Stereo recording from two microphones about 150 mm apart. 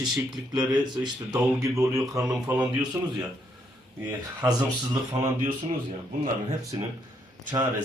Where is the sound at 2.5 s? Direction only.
10° right (ahead or behind).